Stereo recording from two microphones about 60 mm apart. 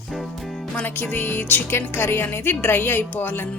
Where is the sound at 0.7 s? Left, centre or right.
Left.